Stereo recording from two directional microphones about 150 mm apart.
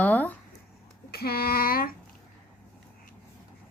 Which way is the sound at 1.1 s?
90° left.